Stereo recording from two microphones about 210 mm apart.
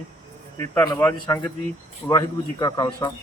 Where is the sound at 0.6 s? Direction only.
15° left (ahead or behind).